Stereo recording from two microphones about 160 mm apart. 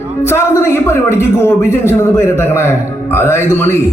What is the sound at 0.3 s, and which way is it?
A man's voice, 15° left (ahead or behind).